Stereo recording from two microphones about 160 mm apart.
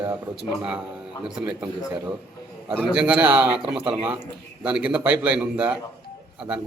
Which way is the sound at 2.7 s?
10° right (ahead or behind).